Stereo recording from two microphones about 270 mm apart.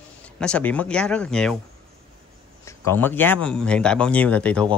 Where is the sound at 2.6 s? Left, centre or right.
Centre.